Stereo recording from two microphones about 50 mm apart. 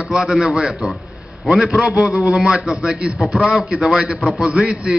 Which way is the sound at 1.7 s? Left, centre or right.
Centre.